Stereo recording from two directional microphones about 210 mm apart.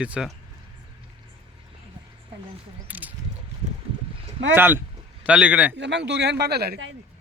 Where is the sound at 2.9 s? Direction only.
10° right (ahead or behind).